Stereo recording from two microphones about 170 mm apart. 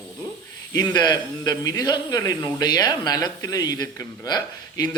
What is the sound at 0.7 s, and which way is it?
Speech, 25° left (ahead or behind).